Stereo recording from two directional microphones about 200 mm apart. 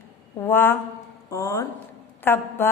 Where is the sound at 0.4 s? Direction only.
10° left (ahead or behind).